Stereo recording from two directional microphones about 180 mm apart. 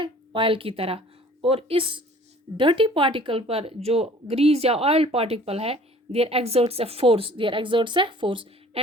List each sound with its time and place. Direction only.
0.0 s speech: 30° right (ahead or behind)